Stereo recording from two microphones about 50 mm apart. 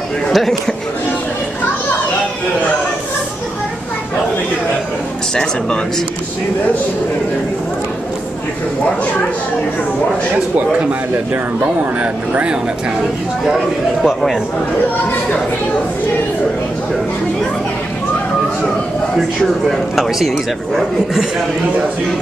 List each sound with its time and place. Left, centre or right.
0.3 s a man's voice: centre
5.3 s speech: centre
10.3 s speech: right
12.0 s speech: right
14.0 s a man's voice: centre
19.7 s a man's voice: centre